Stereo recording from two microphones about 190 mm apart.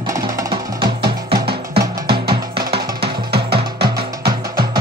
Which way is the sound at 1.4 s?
55° right (ahead or behind).